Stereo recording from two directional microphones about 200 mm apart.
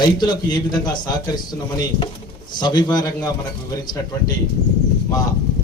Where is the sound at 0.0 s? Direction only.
20° left (ahead or behind).